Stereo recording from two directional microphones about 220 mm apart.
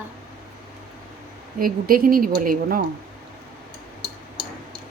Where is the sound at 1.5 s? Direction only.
40° right (ahead or behind).